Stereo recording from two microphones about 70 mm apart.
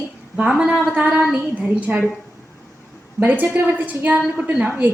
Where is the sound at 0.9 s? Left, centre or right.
Right.